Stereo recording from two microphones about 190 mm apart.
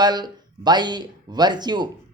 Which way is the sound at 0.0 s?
20° right (ahead or behind).